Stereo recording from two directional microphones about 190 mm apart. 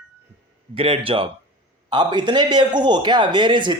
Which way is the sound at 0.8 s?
30° right (ahead or behind).